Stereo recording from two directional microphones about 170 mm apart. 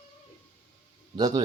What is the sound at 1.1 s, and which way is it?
Speech, 25° right (ahead or behind).